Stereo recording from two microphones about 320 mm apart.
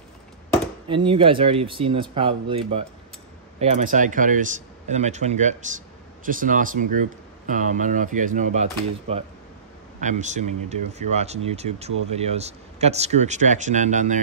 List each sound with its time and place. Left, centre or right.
0.8 s speech: centre